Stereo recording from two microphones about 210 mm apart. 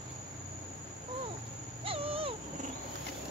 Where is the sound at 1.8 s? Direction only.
25° right (ahead or behind).